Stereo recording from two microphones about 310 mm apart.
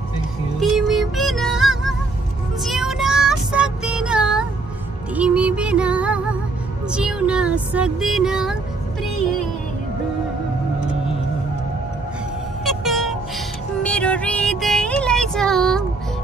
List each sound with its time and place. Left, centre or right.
0.6 s music: centre
2.6 s child singing: centre
5.1 s music: centre
6.9 s a sound: centre
12.6 s music: centre